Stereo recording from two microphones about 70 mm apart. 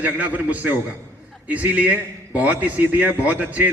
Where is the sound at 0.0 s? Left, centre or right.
Right.